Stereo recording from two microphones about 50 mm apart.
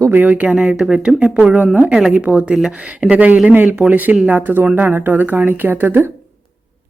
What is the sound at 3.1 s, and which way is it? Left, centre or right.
Speech, right.